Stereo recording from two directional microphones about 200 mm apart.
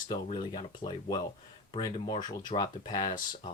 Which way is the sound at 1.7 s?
20° left (ahead or behind).